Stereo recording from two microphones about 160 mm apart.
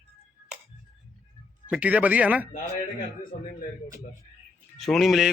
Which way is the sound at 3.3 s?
55° left (ahead or behind).